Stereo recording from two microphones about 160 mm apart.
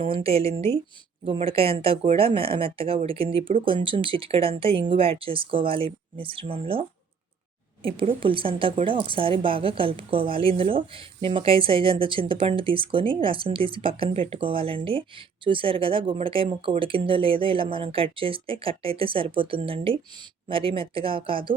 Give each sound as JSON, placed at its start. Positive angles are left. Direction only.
{"t": 0.0, "sound": "a woman's voice", "side_deg": -35}